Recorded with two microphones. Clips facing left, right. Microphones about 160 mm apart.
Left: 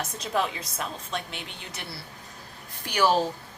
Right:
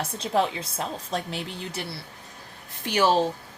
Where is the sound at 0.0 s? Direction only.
30° right (ahead or behind).